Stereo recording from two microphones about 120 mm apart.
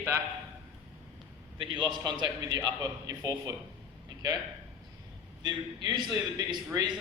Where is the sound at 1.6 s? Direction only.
40° right (ahead or behind).